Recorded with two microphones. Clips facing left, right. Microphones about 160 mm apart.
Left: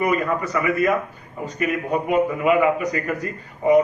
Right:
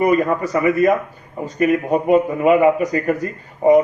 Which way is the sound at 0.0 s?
40° right (ahead or behind).